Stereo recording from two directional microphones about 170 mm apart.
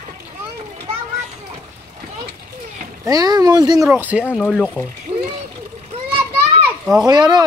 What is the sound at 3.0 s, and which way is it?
Speech, 20° right (ahead or behind).